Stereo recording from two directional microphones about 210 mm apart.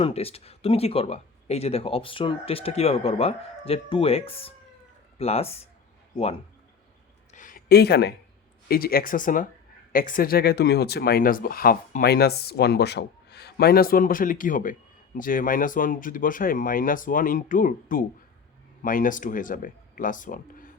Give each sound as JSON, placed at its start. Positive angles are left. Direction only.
{"t": 0.0, "sound": "speech", "side_deg": 30}
{"t": 7.3, "sound": "a sound", "side_deg": 40}
{"t": 8.6, "sound": "speech", "side_deg": 45}